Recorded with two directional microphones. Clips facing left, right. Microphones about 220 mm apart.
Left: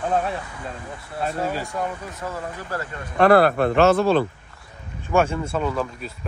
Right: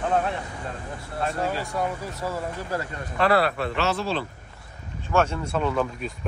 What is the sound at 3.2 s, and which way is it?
Speech, 50° left (ahead or behind).